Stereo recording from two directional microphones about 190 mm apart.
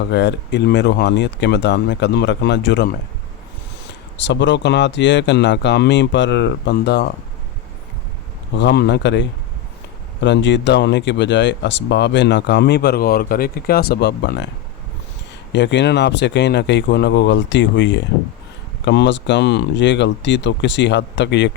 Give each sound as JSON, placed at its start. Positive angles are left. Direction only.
{"t": 0.0, "sound": "speech", "side_deg": 65}
{"t": 4.2, "sound": "speech", "side_deg": 70}
{"t": 8.5, "sound": "speech", "side_deg": 60}
{"t": 15.5, "sound": "speech", "side_deg": 65}